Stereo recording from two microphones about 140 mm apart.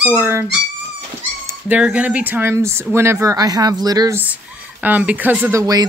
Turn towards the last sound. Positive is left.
turn(degrees=-25)  # may be behind; listen again after turning